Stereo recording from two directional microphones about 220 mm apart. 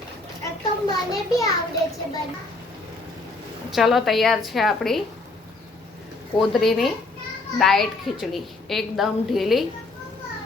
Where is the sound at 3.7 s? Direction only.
Centre (ahead or behind).